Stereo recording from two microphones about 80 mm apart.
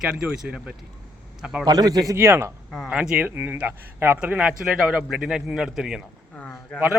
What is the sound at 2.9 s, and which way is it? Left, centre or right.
A man's voice, centre.